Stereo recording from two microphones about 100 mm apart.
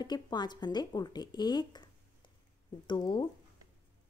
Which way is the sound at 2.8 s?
55° left (ahead or behind).